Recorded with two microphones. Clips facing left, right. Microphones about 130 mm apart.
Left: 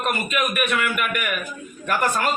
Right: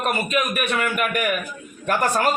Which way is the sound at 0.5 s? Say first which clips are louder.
Even; 35° right (ahead or behind).